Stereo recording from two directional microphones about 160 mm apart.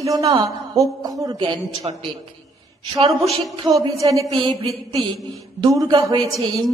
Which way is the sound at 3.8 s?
20° right (ahead or behind).